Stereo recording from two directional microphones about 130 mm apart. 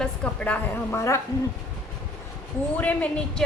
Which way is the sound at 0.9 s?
25° left (ahead or behind).